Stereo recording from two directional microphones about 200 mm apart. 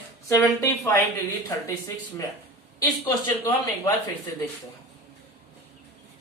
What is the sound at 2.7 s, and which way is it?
Speech, 20° left (ahead or behind).